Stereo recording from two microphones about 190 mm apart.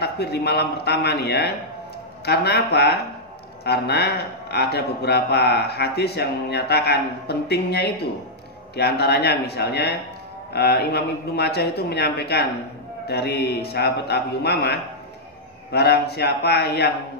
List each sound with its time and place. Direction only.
0.0 s a man's voice: 60° left (ahead or behind)